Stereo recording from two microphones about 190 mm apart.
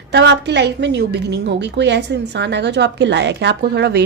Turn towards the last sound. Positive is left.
turn(degrees=-60)  # may be behind; listen again after turning